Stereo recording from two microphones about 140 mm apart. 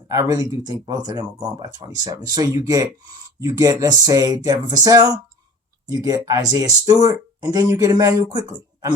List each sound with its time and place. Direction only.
0.1 s speech: 20° right (ahead or behind)